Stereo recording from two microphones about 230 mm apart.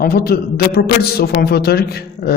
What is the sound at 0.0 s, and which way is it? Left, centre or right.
A man's voice, left.